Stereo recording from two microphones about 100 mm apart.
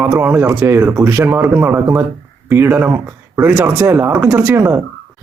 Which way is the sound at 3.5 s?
30° right (ahead or behind).